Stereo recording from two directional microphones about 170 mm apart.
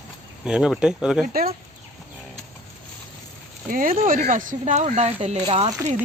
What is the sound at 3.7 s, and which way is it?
Speech, 55° right (ahead or behind).